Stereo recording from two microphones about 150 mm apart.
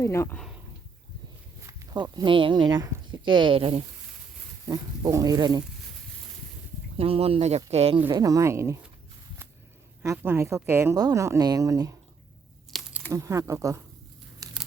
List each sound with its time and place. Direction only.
0.0 s speech: 20° left (ahead or behind)
1.6 s speech: 25° right (ahead or behind)
4.7 s speech: 25° right (ahead or behind)
6.9 s speech: 40° right (ahead or behind)
7.9 s speech: 15° right (ahead or behind)
10.0 s speech: 20° right (ahead or behind)
13.1 s speech: 20° right (ahead or behind)